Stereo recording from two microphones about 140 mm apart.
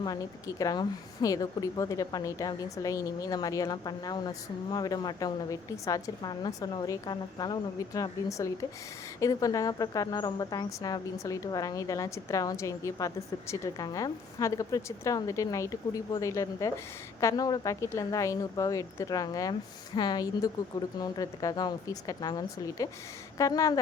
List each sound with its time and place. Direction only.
0.0 s speech: 25° left (ahead or behind)